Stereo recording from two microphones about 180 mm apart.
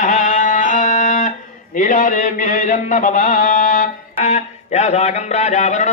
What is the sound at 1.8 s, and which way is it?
Music, 45° left (ahead or behind).